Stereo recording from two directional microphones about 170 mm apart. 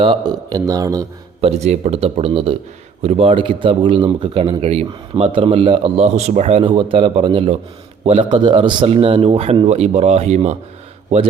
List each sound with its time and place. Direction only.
0.0 s speech: 30° right (ahead or behind)
1.4 s a man's voice: 40° right (ahead or behind)